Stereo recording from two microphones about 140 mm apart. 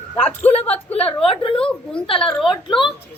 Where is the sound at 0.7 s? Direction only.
45° left (ahead or behind).